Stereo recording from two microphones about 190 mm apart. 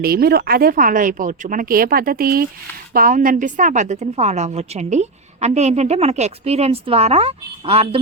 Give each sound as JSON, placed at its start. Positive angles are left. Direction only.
{"t": 0.0, "sound": "a woman's voice", "side_deg": -55}